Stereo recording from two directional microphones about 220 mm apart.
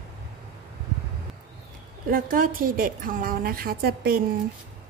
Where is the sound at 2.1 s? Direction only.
40° right (ahead or behind).